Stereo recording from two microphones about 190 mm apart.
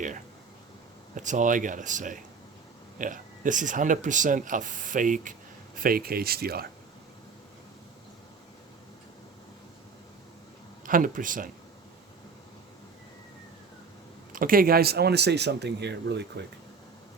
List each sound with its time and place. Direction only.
1.1 s speech: 40° right (ahead or behind)
10.8 s speech: 45° right (ahead or behind)
14.3 s speech: 50° right (ahead or behind); by 16.5 s 65° right (ahead or behind)